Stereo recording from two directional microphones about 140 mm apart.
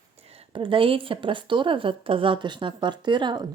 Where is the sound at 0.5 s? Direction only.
40° right (ahead or behind).